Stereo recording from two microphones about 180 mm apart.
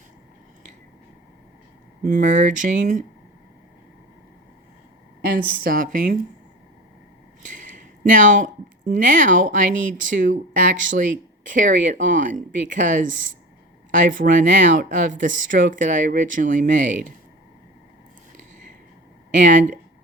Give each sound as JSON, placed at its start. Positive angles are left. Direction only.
{"t": 2.0, "sound": "speech", "side_deg": -45}
{"t": 5.2, "sound": "speech", "side_deg": -55}
{"t": 7.4, "sound": "speech", "side_deg": -45}
{"t": 19.3, "sound": "speech", "side_deg": -45}